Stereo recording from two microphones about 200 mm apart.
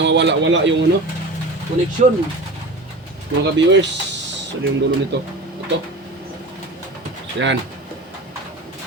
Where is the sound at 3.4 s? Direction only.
65° right (ahead or behind).